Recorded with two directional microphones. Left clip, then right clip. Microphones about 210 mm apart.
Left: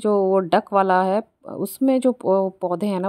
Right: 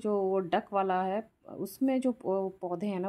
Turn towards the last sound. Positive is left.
turn(degrees=40)  # may be behind; listen again after turning